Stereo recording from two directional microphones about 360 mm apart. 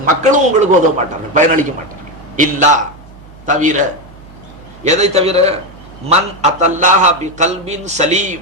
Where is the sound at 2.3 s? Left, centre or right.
Right.